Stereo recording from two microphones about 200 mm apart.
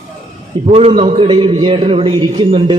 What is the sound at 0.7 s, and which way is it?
A man's voice, 30° right (ahead or behind).